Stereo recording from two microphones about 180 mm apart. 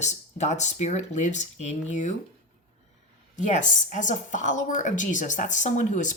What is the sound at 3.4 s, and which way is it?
A woman's voice, 45° left (ahead or behind).